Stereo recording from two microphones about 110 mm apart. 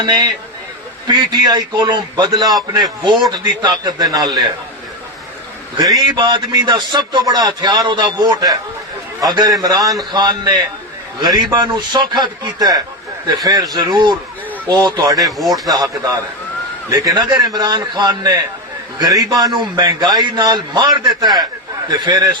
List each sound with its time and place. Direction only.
0.0 s a man's voice: 40° right (ahead or behind)
6.1 s a man's voice: 45° right (ahead or behind)
15.2 s speech: centre (ahead or behind)
15.6 s a man's voice: 35° right (ahead or behind)